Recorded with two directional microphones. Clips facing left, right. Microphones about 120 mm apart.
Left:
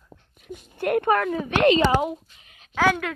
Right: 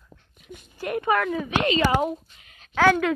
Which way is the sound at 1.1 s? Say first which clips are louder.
Left 1 dB; 35° left (ahead or behind).